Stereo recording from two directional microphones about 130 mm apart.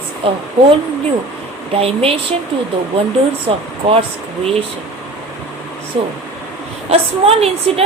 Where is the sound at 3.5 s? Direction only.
40° right (ahead or behind).